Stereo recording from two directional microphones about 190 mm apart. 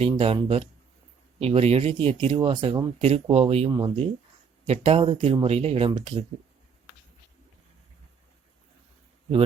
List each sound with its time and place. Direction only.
0.0 s speech: 30° right (ahead or behind)